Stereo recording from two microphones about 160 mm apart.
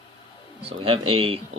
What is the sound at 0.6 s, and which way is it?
Speech, 35° right (ahead or behind).